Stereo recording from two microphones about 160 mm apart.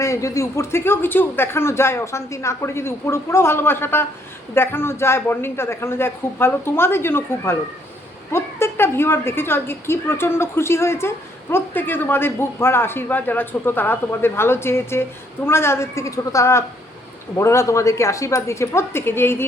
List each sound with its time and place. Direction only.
0.0 s speech: 20° left (ahead or behind)